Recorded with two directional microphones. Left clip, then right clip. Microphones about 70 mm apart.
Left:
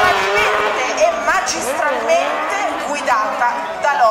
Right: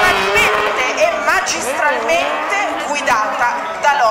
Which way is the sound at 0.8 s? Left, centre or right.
Right.